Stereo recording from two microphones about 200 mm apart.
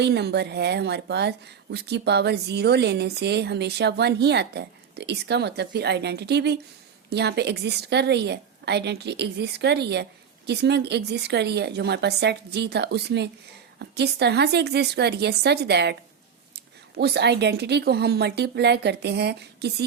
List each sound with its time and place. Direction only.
0.0 s speech: 55° right (ahead or behind)
17.0 s speech: 55° right (ahead or behind)